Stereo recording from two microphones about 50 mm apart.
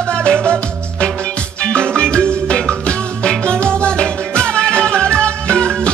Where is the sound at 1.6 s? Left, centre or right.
Centre.